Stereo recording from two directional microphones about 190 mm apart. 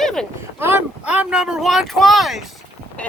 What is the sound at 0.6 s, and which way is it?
Speech, 10° right (ahead or behind).